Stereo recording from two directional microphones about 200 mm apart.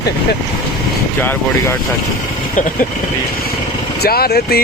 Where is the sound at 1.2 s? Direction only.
10° left (ahead or behind).